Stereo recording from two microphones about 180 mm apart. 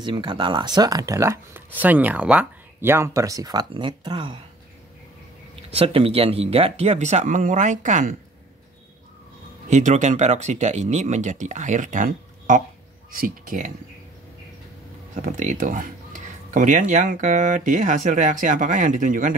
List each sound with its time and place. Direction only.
0.0 s speech: 25° right (ahead or behind)
5.6 s speech: 30° right (ahead or behind)
9.7 s speech: 40° right (ahead or behind)
15.1 s speech: 45° right (ahead or behind)